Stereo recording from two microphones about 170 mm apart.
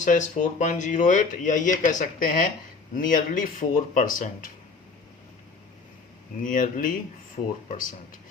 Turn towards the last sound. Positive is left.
turn(degrees=50)  # may be behind; listen again after turning